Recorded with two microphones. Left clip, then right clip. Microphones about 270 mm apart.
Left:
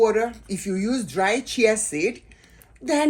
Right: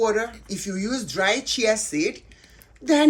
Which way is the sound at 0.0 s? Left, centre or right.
Centre.